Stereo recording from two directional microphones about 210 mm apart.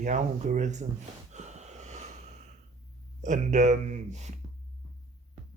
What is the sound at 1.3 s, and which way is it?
Wheeze, 35° right (ahead or behind).